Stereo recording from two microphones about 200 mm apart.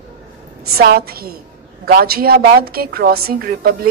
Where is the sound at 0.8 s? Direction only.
50° right (ahead or behind).